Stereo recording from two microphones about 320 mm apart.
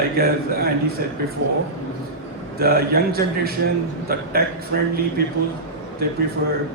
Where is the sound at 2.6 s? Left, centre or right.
Right.